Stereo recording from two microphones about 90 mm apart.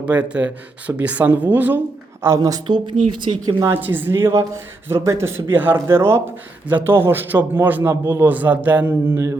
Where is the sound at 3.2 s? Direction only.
60° right (ahead or behind).